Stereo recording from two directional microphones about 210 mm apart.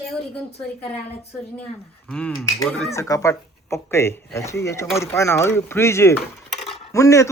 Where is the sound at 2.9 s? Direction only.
15° left (ahead or behind).